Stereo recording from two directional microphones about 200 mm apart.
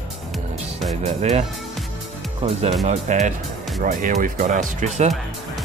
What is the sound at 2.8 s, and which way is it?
Speech, 35° right (ahead or behind).